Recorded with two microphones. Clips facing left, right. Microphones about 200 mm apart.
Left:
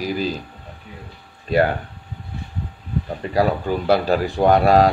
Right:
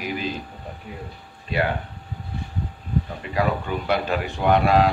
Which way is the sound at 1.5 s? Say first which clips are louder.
Left 7 dB; 40° left (ahead or behind).